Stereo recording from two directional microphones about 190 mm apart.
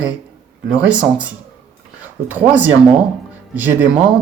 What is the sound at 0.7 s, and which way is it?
Speech, 5° right (ahead or behind).